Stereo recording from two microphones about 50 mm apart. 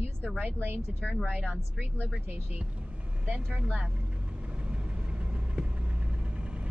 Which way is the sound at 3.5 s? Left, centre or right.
Right.